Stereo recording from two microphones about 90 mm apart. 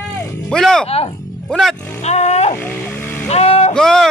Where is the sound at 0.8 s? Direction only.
90° left.